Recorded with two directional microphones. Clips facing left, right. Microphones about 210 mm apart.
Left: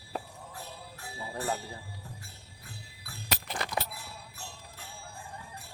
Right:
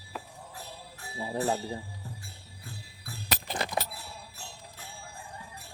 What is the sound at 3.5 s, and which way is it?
Music, 25° right (ahead or behind).